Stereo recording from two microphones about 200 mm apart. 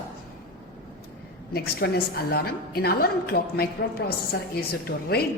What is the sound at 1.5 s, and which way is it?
Speech, 50° left (ahead or behind).